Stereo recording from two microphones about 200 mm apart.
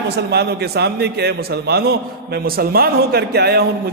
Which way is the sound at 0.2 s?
55° right (ahead or behind).